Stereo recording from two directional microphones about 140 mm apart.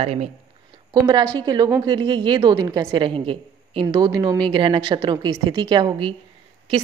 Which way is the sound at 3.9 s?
30° right (ahead or behind).